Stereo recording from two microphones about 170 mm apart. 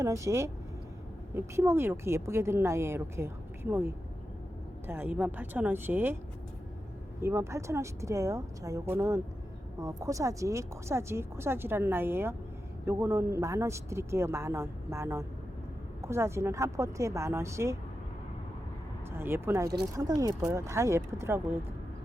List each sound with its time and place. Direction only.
0.0 s speech: 15° right (ahead or behind)
7.2 s speech: 15° right (ahead or behind)
19.1 s speech: 15° right (ahead or behind)